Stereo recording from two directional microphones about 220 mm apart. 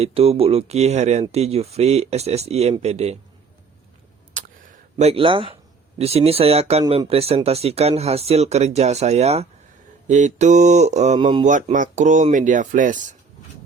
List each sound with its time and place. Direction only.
0.0 s speech: 25° right (ahead or behind)
4.4 s a sound: 30° right (ahead or behind)
6.0 s speech: 30° right (ahead or behind)
11.4 s speech: 35° right (ahead or behind)